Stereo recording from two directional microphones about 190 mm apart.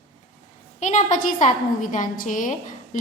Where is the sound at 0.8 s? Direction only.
40° left (ahead or behind).